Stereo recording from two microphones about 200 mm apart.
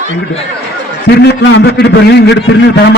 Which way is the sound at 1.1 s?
55° left (ahead or behind).